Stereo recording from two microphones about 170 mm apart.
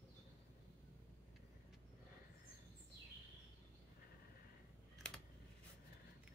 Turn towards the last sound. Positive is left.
turn(degrees=5)  # may be behind; listen again after turning